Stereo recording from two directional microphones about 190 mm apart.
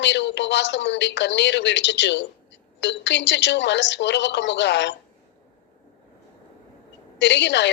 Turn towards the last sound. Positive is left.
turn(degrees=65)  # may be behind; listen again after turning